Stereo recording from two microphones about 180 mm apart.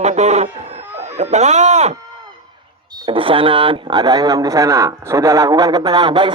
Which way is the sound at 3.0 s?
25° right (ahead or behind).